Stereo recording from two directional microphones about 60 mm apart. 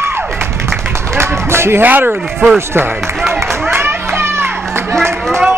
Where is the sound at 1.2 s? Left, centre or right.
Right.